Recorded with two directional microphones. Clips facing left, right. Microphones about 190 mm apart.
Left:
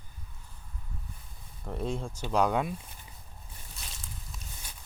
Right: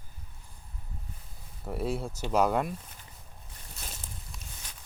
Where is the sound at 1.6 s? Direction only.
5° right (ahead or behind).